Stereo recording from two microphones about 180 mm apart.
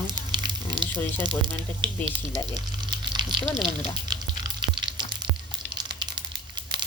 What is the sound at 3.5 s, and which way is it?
Speech, 25° right (ahead or behind).